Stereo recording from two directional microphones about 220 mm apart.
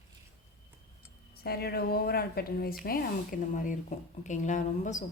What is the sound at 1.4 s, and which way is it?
Speech, 45° left (ahead or behind).